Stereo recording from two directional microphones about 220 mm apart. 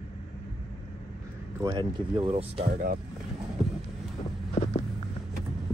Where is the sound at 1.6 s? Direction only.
20° right (ahead or behind).